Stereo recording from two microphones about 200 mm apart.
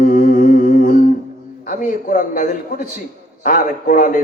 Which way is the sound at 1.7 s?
40° left (ahead or behind).